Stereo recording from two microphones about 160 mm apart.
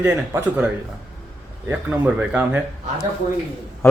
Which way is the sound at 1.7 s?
10° right (ahead or behind).